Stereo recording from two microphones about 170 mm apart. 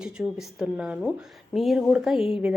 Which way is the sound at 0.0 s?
5° right (ahead or behind).